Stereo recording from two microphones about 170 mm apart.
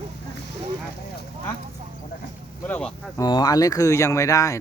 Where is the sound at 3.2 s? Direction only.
25° left (ahead or behind).